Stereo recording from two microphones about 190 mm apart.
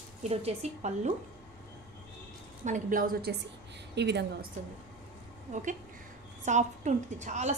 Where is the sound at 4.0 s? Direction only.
60° right (ahead or behind).